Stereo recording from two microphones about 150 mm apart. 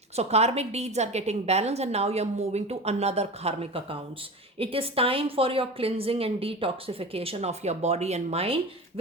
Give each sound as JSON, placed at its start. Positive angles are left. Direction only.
{"t": 0.2, "sound": "a woman's voice", "side_deg": -45}